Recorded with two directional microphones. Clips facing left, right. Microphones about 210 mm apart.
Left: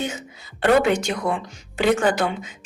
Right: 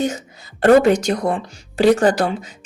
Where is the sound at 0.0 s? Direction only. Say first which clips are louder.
Right 7 dB; 40° right (ahead or behind).